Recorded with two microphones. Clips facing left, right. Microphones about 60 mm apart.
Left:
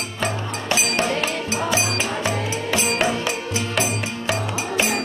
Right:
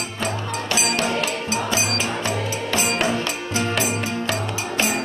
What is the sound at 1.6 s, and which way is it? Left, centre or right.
Music, left.